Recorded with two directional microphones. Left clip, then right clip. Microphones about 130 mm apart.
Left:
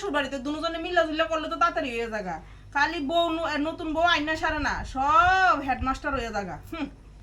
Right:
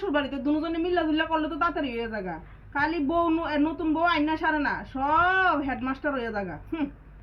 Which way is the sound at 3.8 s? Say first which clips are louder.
Left 3 dB; 30° left (ahead or behind).